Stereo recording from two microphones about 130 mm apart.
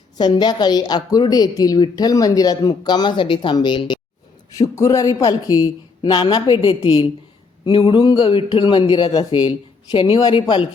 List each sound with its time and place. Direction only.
0.2 s speech: 35° left (ahead or behind)
4.7 s speech: 25° left (ahead or behind)